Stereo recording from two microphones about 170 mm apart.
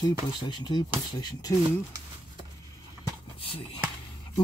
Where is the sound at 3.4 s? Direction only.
30° left (ahead or behind).